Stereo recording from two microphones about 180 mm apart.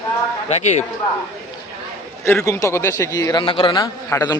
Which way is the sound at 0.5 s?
40° left (ahead or behind).